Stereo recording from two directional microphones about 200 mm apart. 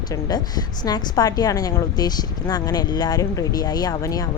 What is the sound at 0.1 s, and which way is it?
A woman's voice, 20° left (ahead or behind).